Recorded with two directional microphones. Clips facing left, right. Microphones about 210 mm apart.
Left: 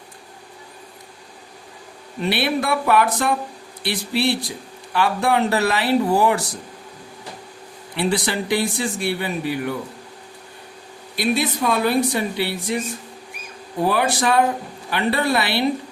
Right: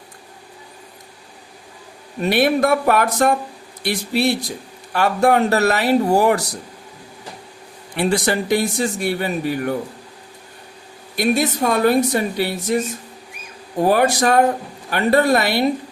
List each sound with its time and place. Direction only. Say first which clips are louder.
2.3 s speech: right 6 dB; 45° right (ahead or behind)
7.9 s speech: right 3 dB; 45° right (ahead or behind)
11.2 s speech: right 3 dB; 45° right (ahead or behind)